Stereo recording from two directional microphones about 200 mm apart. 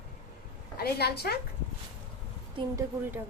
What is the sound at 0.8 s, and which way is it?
Speech, 55° left (ahead or behind).